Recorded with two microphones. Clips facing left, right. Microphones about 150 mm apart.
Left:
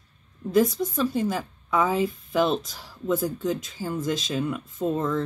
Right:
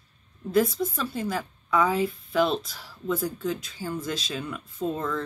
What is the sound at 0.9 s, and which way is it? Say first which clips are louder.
A woman's voice: left 5 dB; 15° left (ahead or behind).